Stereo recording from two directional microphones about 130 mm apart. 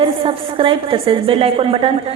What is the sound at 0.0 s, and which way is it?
A woman's voice, 45° right (ahead or behind).